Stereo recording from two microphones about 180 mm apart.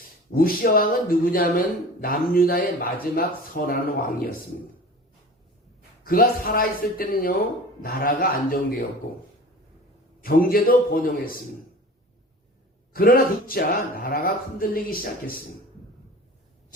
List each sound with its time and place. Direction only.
0.3 s speech: 55° left (ahead or behind)
6.1 s speech: 55° left (ahead or behind)
10.2 s speech: 55° left (ahead or behind)
12.9 s speech: 55° left (ahead or behind)